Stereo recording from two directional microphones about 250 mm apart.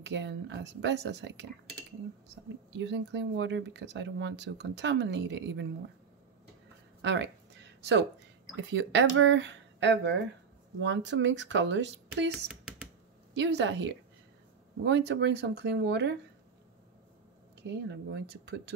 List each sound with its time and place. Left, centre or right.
0.0 s speech: right
2.8 s speech: right
7.0 s speech: right
8.5 s speech: right
17.9 s speech: right